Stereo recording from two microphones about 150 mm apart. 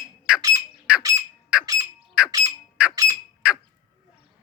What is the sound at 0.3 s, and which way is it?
Squawk, 10° right (ahead or behind).